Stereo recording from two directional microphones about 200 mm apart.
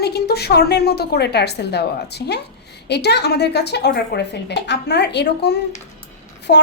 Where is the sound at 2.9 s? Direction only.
55° left (ahead or behind).